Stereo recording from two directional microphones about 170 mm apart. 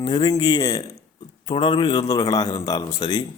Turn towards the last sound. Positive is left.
turn(degrees=25)  # may be behind; listen again after turning